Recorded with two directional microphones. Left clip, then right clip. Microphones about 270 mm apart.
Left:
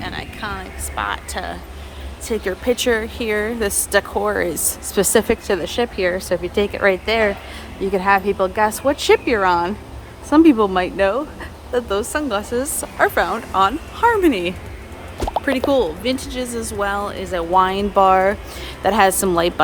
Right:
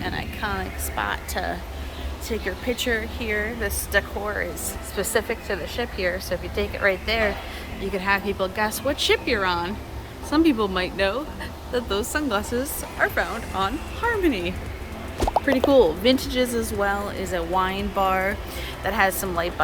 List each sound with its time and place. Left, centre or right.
0.0 s a woman's voice: centre
2.3 s speech: centre
13.0 s speech: left
15.2 s speech: centre; by 19.6 s left